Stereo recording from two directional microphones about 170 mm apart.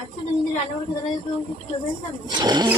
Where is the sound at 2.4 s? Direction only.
25° right (ahead or behind).